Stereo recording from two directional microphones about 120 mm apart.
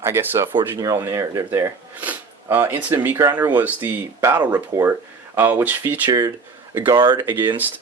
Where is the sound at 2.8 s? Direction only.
15° right (ahead or behind).